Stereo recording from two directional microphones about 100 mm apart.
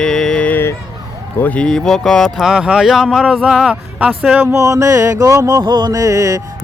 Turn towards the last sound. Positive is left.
turn(degrees=-35)  # may be behind; listen again after turning